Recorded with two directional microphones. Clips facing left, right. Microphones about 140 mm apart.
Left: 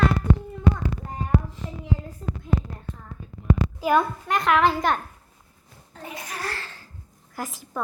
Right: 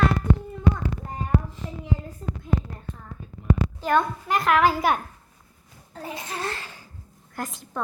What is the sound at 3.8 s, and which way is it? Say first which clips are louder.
A child's voice: left 2 dB; 5° left (ahead or behind).